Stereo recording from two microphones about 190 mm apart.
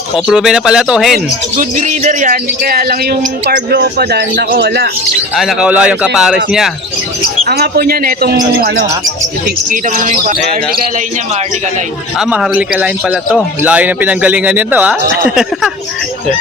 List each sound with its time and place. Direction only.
0.3 s speech: 5° right (ahead or behind)
1.5 s a man's voice: 45° right (ahead or behind); by 4.9 s 60° right (ahead or behind)
5.4 s speech: 5° right (ahead or behind)
7.4 s a man's voice: 60° right (ahead or behind)
9.6 s speech: 40° right (ahead or behind)
12.2 s a man's voice: 5° right (ahead or behind)